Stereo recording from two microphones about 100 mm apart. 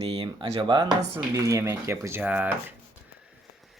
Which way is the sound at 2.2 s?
15° right (ahead or behind).